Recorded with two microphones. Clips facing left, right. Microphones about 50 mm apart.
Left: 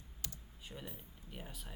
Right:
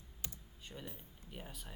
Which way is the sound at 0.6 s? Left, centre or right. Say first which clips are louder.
Even; centre.